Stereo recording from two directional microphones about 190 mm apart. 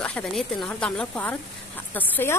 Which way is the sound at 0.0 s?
5° left (ahead or behind).